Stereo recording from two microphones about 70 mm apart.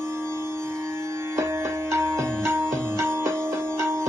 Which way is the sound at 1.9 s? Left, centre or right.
Right.